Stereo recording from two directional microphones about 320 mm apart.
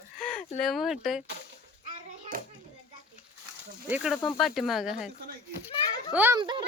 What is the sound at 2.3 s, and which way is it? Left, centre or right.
Children playing, right.